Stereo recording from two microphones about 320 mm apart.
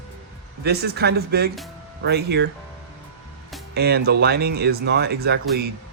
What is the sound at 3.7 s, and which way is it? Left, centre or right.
Speech, right.